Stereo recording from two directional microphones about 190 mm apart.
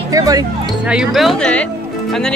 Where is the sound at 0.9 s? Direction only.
Centre (ahead or behind).